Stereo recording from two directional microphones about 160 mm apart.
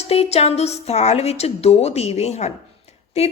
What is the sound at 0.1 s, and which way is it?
A woman's voice, 40° left (ahead or behind).